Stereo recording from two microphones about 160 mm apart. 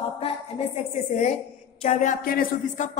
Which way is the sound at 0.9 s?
45° left (ahead or behind).